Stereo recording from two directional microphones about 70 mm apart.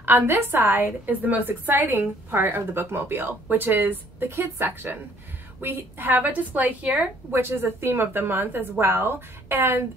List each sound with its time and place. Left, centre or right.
0.0 s a woman's voice: right
7.2 s a woman's voice: right